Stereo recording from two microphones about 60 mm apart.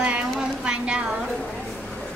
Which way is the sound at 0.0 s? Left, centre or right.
Centre.